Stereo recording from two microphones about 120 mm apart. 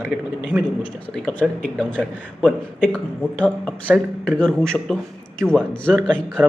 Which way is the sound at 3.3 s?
10° left (ahead or behind).